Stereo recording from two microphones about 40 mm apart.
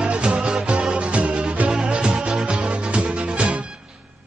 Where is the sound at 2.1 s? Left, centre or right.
Centre.